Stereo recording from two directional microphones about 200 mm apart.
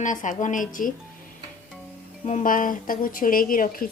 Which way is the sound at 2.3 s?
40° left (ahead or behind).